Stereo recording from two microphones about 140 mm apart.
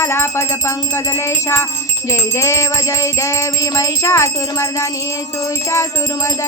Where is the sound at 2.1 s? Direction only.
20° left (ahead or behind).